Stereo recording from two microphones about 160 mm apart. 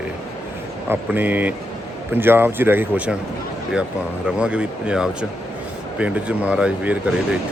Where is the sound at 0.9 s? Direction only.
10° right (ahead or behind).